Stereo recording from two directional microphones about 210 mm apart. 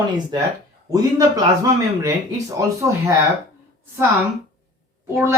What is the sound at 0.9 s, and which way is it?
Speech, 15° right (ahead or behind).